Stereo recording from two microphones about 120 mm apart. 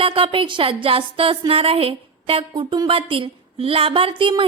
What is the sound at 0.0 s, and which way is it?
A woman's voice, 50° right (ahead or behind).